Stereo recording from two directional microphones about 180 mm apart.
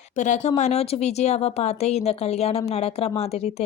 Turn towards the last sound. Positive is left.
turn(degrees=35)  # may be behind; listen again after turning